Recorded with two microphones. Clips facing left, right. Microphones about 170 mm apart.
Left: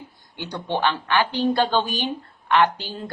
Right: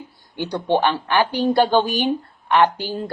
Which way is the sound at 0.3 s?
15° right (ahead or behind).